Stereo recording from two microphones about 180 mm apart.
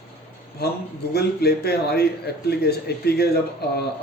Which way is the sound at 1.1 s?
60° left (ahead or behind).